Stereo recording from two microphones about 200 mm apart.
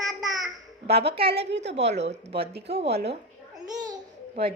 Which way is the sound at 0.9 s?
55° right (ahead or behind).